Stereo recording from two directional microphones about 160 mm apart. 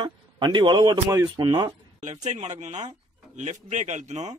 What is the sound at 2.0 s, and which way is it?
A man's voice, 45° right (ahead or behind).